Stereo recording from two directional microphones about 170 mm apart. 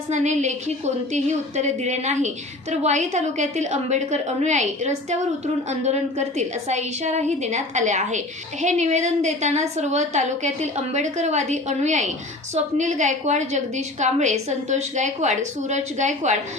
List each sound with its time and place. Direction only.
0.1 s a woman's voice: 45° right (ahead or behind)